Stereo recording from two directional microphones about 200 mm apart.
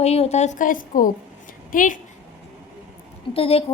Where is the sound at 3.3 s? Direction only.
30° left (ahead or behind).